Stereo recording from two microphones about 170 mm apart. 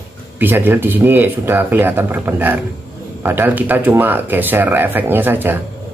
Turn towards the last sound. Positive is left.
turn(degrees=-10)  # may be behind; listen again after turning